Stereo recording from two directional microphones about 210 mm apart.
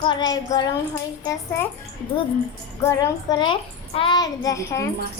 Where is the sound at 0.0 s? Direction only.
20° left (ahead or behind).